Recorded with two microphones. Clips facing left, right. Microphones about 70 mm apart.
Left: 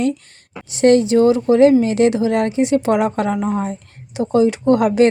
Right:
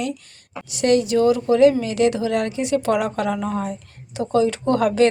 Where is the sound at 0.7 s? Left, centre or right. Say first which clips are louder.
Left 5 dB; left.